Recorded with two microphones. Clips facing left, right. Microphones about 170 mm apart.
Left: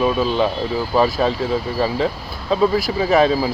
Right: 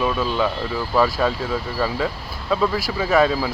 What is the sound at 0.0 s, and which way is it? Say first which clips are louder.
Speech: left 4 dB; 20° left (ahead or behind).